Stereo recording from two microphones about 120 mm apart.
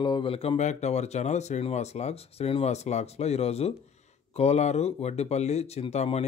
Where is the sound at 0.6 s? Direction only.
75° left (ahead or behind).